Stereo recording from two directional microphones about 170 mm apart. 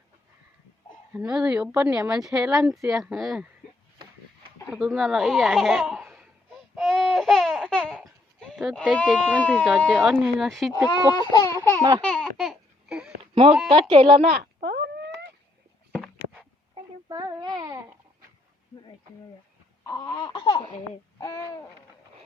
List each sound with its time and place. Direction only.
1.1 s speech: 5° right (ahead or behind)
4.7 s speech: centre (ahead or behind)
6.7 s babbling: centre (ahead or behind)
9.5 s speech: 5° right (ahead or behind)
11.2 s a sound: 25° left (ahead or behind)
11.8 s speech: 20° right (ahead or behind)
12.0 s babbling: 5° left (ahead or behind)
13.7 s speech: 30° right (ahead or behind)
14.3 s a sound: 75° right (ahead or behind)
16.7 s baby cry: 25° right (ahead or behind)
19.9 s laughter: 20° left (ahead or behind)
21.2 s speech: 25° left (ahead or behind)